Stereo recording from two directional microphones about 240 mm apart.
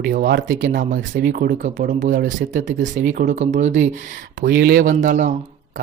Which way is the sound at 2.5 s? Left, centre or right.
Right.